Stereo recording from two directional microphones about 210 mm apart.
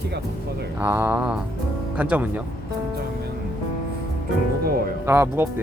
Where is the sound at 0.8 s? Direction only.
10° right (ahead or behind).